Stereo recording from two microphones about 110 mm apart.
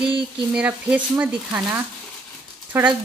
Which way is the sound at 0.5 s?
15° right (ahead or behind).